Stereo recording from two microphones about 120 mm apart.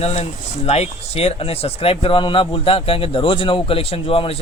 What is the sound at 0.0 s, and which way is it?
Speech, 60° left (ahead or behind).